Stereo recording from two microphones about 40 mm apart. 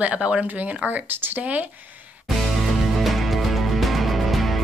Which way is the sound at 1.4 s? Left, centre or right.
Right.